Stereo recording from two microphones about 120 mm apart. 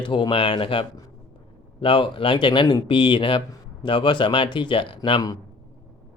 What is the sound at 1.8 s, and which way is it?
Speech, 45° left (ahead or behind).